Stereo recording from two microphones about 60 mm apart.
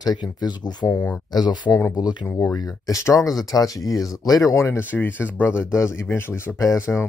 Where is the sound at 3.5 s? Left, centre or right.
Left.